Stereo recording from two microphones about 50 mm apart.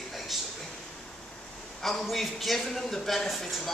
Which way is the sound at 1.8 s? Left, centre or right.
Centre.